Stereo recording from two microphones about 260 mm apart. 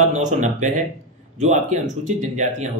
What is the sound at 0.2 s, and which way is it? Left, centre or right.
Speech, right.